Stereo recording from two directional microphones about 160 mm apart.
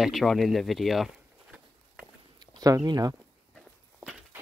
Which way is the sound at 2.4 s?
25° right (ahead or behind).